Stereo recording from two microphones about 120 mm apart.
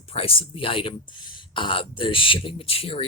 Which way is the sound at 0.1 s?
55° left (ahead or behind).